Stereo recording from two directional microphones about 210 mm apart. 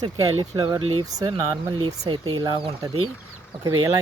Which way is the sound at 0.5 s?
20° right (ahead or behind).